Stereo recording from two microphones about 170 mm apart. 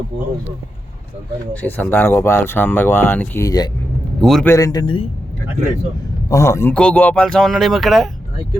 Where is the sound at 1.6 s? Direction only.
10° left (ahead or behind).